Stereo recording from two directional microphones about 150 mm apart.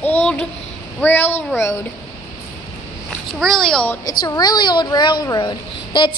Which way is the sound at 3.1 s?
5° left (ahead or behind).